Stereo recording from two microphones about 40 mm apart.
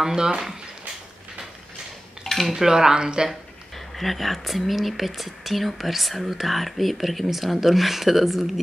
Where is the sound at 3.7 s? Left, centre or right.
Centre.